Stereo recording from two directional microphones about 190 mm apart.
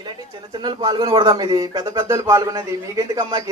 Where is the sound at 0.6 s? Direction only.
20° right (ahead or behind).